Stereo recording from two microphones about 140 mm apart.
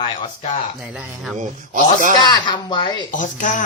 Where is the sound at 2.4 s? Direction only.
35° left (ahead or behind).